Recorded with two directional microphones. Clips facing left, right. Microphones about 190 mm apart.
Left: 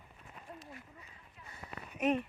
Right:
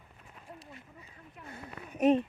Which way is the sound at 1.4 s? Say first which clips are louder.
Right 4 dB; 55° right (ahead or behind).